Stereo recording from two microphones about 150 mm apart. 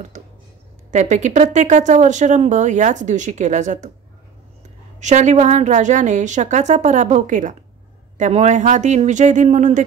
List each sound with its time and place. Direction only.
0.1 s a sound: 55° right (ahead or behind)
0.9 s speech: 50° right (ahead or behind)
5.0 s speech: 50° right (ahead or behind)